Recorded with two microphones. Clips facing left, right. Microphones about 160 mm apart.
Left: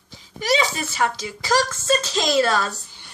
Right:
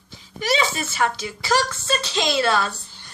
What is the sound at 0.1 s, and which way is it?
Speech, 35° left (ahead or behind).